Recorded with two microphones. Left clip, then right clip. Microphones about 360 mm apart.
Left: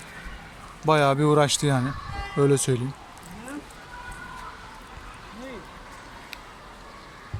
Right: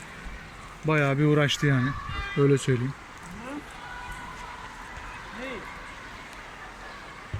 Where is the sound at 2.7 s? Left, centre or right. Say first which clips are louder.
Left 1 dB; left.